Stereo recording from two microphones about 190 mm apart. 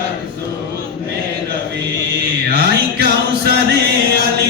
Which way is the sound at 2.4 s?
55° right (ahead or behind).